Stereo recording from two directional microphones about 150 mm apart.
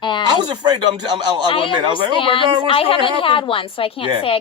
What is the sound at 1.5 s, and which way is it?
A woman's voice, 35° left (ahead or behind).